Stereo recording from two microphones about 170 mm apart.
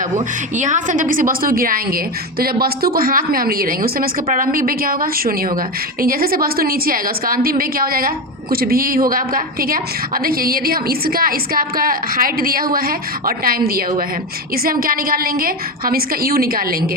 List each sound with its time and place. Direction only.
0.5 s a woman's voice: 45° right (ahead or behind)